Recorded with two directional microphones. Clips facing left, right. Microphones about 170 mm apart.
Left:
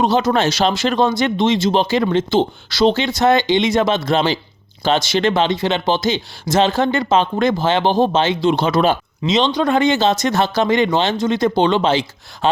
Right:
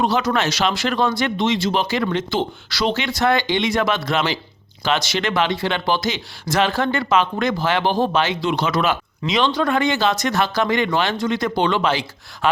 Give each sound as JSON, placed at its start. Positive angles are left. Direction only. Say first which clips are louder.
{"t": 0.0, "sound": "speech", "louder": "left 4 dB", "side_deg": 25}